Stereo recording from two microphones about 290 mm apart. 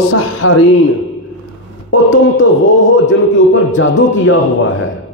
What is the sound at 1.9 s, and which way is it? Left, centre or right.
Speech, left.